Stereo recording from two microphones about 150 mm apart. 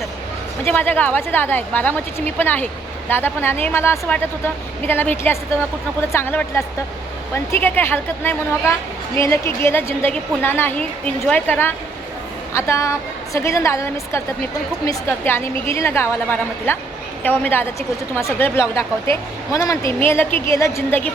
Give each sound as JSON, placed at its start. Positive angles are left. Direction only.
{"t": 0.6, "sound": "a woman's voice", "side_deg": 10}